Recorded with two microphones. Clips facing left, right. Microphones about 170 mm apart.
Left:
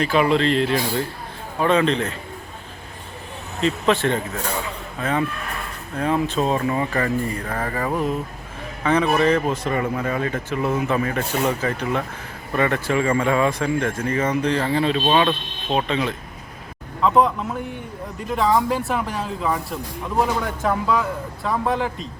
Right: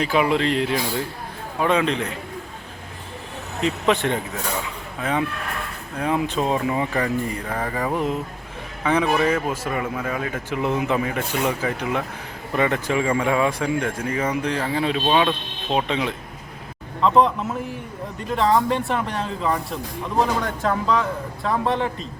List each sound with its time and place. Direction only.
0.0 s a man's voice: 10° right (ahead or behind)
3.6 s a man's voice: 15° right (ahead or behind)
6.0 s a man's voice: 10° right (ahead or behind)
10.5 s a man's voice: 15° right (ahead or behind)
15.7 s a man's voice: 15° right (ahead or behind)
17.0 s speech: centre (ahead or behind)